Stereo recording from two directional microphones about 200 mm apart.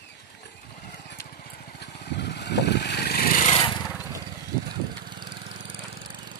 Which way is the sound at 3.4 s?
25° left (ahead or behind).